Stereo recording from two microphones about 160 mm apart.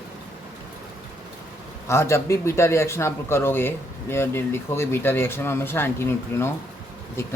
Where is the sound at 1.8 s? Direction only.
15° left (ahead or behind).